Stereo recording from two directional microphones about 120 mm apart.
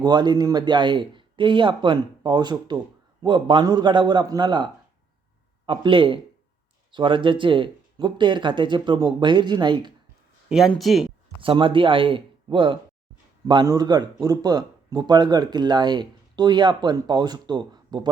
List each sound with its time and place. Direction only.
0.0 s a man's voice: 35° right (ahead or behind)
10.5 s speech: centre (ahead or behind)
11.3 s a man's voice: 45° right (ahead or behind)
13.7 s a man's voice: 35° right (ahead or behind)